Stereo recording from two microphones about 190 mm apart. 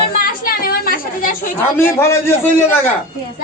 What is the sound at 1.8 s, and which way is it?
A man's voice, 15° left (ahead or behind).